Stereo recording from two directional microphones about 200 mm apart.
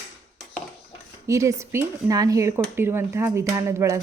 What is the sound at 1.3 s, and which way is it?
Speech, 15° right (ahead or behind).